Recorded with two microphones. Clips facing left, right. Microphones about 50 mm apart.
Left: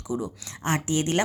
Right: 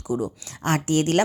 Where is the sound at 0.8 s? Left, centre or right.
Right.